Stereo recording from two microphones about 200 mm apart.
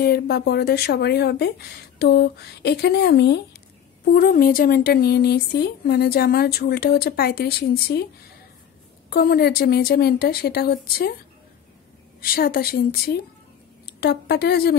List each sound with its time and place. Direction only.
0.0 s speech: 55° left (ahead or behind)
4.1 s speech: 45° left (ahead or behind)
9.1 s speech: 50° left (ahead or behind)
12.2 s speech: 50° left (ahead or behind)